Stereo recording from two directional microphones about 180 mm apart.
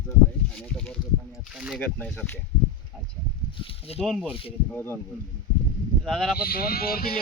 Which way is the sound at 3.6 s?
35° left (ahead or behind).